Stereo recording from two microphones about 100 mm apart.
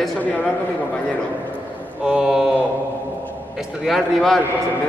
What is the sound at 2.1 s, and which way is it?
Speech, 10° right (ahead or behind).